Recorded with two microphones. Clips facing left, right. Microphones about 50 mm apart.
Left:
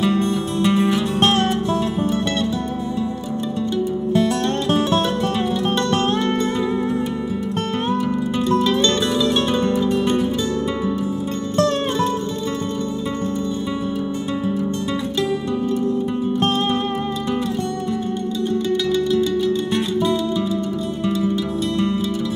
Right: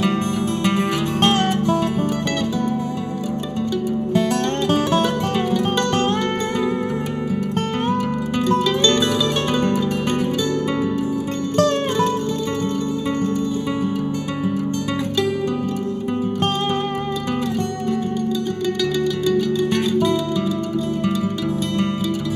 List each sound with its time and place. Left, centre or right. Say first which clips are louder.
0.1 s music: left 1 dB; right
9.7 s music: left 2 dB; right